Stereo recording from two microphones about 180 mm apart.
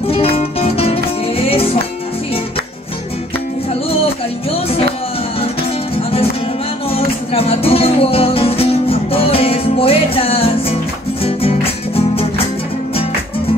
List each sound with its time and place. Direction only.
0.1 s music: 35° left (ahead or behind)
6.9 s music: 30° left (ahead or behind)